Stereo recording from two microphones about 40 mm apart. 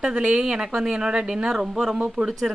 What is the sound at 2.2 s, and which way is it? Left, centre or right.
Speech, right.